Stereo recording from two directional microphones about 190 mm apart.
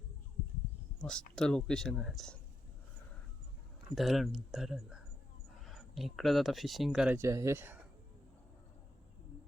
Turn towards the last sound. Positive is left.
turn(degrees=-10)  # may be behind; listen again after turning